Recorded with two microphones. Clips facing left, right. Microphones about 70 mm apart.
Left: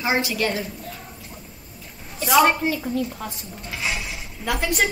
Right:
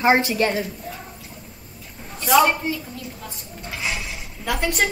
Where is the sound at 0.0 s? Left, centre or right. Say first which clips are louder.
Right 5 dB; right.